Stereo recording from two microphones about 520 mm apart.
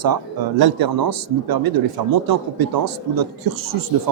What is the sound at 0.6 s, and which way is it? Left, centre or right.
A man's voice, right.